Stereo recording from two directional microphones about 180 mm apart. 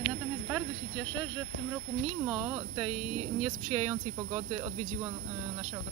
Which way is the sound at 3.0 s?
35° right (ahead or behind).